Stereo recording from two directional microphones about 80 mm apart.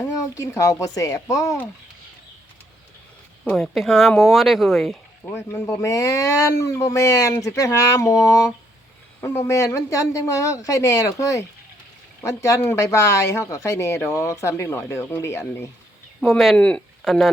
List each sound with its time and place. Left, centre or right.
0.2 s speech: left
3.5 s speech: centre
5.3 s speech: left
16.6 s speech: centre
17.0 s speech: centre